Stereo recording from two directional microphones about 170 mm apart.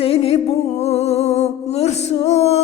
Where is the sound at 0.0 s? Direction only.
35° left (ahead or behind).